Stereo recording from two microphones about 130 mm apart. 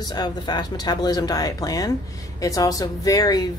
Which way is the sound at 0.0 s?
35° left (ahead or behind).